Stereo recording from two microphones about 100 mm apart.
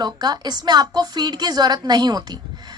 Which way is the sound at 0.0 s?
45° right (ahead or behind).